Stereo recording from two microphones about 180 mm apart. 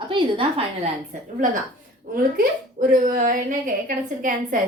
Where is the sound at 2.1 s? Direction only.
50° right (ahead or behind).